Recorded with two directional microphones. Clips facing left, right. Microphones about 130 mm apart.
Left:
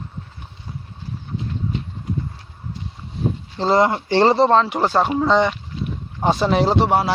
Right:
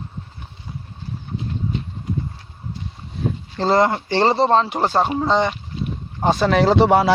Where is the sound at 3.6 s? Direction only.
40° right (ahead or behind).